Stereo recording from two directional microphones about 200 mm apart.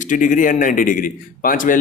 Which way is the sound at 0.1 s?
40° left (ahead or behind).